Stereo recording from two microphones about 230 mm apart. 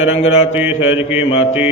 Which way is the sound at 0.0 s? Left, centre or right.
Left.